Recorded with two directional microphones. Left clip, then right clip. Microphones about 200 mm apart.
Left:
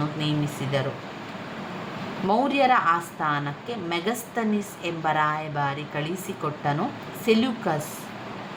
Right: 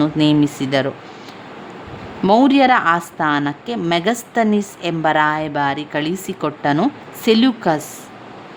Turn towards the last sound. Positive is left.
turn(degrees=-40)  # may be behind; listen again after turning